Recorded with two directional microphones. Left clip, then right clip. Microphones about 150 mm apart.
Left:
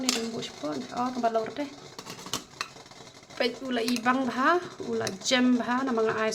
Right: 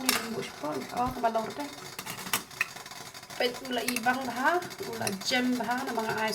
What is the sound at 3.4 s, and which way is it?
Speech, 55° left (ahead or behind).